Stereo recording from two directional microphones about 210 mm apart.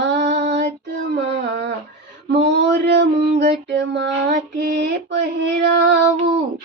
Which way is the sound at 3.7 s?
55° right (ahead or behind).